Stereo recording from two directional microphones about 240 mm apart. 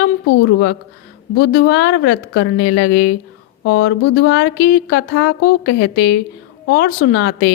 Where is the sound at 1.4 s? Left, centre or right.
Left.